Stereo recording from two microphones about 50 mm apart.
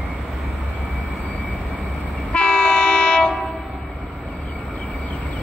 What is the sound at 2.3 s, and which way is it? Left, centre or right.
Train, left.